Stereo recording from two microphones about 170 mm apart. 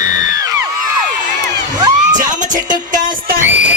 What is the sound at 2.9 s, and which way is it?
Music, 50° right (ahead or behind).